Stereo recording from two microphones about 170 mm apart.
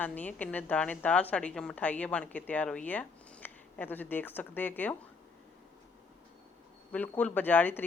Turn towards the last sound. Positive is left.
turn(degrees=10)  # may be behind; listen again after turning